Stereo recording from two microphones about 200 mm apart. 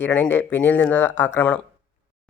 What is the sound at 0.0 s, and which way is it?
Speech, 10° left (ahead or behind).